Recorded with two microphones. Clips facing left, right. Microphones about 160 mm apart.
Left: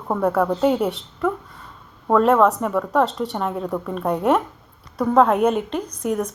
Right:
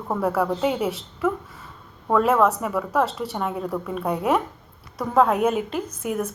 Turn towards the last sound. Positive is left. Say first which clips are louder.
# left 3 dB
turn(degrees=-5)  # may be behind; listen again after turning